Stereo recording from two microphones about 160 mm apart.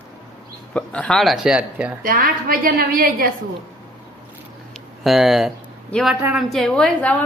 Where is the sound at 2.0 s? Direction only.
65° right (ahead or behind).